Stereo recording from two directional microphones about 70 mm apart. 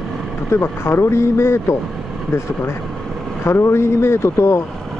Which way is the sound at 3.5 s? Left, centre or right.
Left.